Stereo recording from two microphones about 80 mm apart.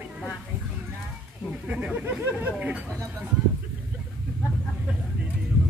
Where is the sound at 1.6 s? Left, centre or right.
Centre.